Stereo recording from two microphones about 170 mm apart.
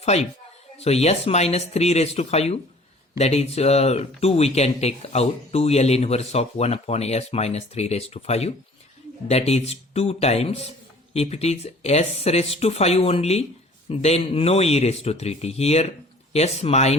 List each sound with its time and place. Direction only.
0.0 s speech: 40° left (ahead or behind)